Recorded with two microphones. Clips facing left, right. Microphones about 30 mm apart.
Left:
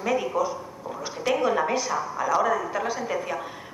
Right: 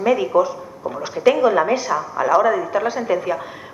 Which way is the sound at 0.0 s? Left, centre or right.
Centre.